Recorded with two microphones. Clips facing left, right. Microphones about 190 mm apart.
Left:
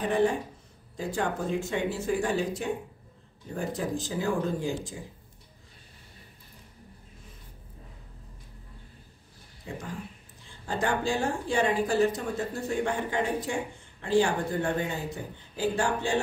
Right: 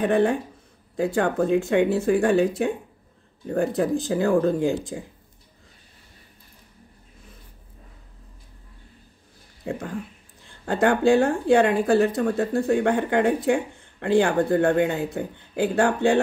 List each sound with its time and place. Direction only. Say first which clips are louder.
0.0 s speech: right 5 dB; 60° right (ahead or behind)
9.6 s speech: right 8 dB; 60° right (ahead or behind)